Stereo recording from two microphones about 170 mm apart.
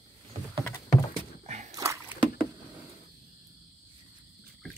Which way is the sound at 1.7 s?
15° right (ahead or behind).